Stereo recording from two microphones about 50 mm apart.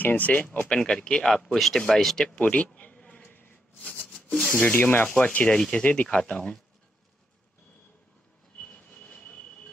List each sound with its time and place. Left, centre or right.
0.0 s speech: left
0.7 s speech: centre
1.3 s speech: centre
2.3 s a sound: left
3.2 s a sound: left
4.5 s speech: left
5.5 s speech: centre
9.1 s train wheels squealing: left